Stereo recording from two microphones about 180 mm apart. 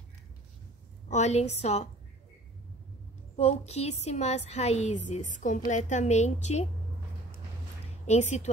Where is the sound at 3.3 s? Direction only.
35° left (ahead or behind).